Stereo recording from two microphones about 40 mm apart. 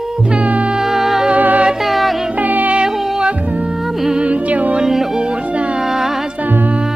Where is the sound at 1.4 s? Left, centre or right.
Right.